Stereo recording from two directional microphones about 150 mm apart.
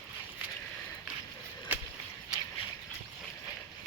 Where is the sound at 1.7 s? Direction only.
10° right (ahead or behind).